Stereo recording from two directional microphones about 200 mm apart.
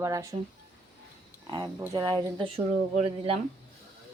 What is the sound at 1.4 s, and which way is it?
Speech, 20° right (ahead or behind).